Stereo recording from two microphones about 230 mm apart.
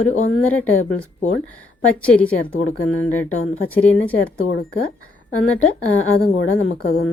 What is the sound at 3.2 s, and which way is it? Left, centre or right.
Speech, left.